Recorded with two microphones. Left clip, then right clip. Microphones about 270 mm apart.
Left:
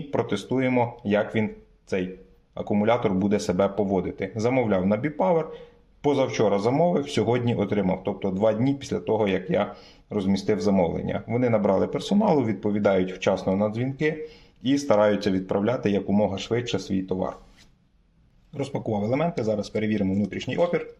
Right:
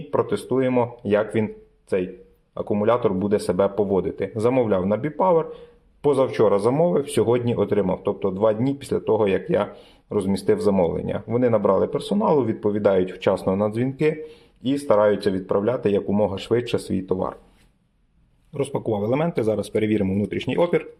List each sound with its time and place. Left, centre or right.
0.1 s speech: centre
2.6 s speech: centre
14.8 s speech: centre
18.5 s speech: centre